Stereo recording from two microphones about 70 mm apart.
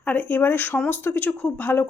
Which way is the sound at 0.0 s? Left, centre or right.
Left.